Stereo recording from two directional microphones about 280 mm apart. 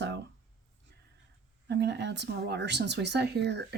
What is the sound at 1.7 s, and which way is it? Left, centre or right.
Speech, right.